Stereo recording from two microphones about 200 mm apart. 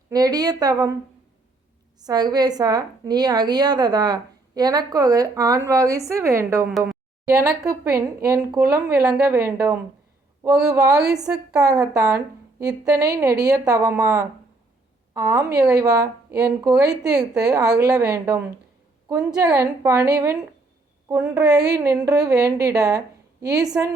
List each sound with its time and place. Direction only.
0.1 s a woman's voice: 20° right (ahead or behind)
2.0 s a woman's voice: 20° right (ahead or behind)